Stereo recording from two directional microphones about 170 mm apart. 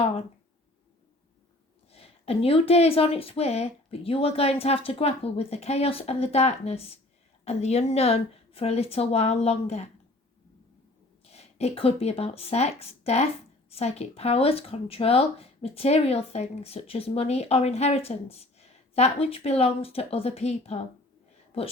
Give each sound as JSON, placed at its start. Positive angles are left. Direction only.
{"t": 1.9, "sound": "a woman's voice", "side_deg": 35}
{"t": 11.3, "sound": "a woman's voice", "side_deg": 40}